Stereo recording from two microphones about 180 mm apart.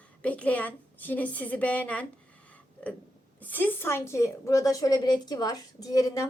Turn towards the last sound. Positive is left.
turn(degrees=20)  # may be behind; listen again after turning